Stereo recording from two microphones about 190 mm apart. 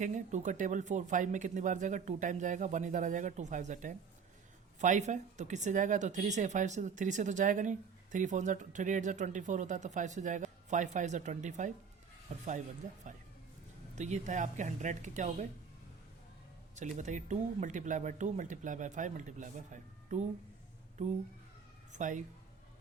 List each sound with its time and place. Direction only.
0.0 s speech: 40° right (ahead or behind)
16.7 s speech: 40° right (ahead or behind)
21.9 s speech: 40° right (ahead or behind)